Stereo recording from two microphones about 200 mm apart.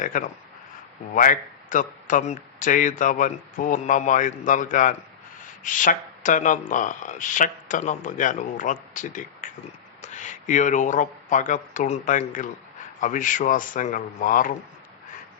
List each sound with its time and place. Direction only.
0.0 s a man's voice: 40° left (ahead or behind)